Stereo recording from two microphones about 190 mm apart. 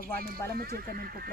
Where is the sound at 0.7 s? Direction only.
50° right (ahead or behind).